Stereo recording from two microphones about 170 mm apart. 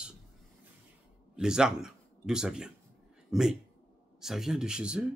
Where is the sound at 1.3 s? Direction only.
5° right (ahead or behind).